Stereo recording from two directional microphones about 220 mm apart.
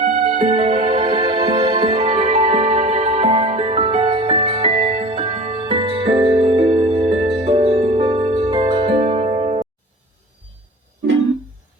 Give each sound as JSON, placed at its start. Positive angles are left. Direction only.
{"t": 0.0, "sound": "music", "side_deg": -25}